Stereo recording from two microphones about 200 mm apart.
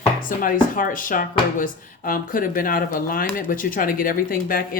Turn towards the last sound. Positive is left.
turn(degrees=45)  # may be behind; listen again after turning